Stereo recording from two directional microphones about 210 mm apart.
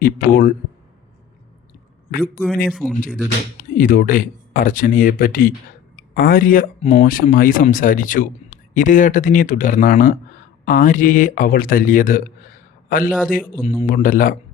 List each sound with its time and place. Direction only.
0.0 s a man's voice: 45° left (ahead or behind)
2.6 s speech: centre (ahead or behind)
3.6 s speech: 40° left (ahead or behind)